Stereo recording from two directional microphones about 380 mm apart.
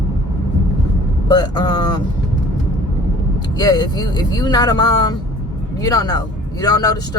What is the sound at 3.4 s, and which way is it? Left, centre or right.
Speech, centre.